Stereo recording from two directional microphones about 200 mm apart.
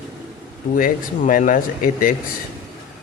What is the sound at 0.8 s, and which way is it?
Speech, 40° left (ahead or behind).